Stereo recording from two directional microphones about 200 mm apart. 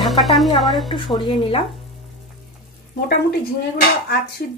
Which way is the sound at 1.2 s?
30° left (ahead or behind).